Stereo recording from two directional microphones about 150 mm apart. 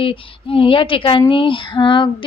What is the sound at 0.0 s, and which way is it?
A woman's voice, 35° left (ahead or behind).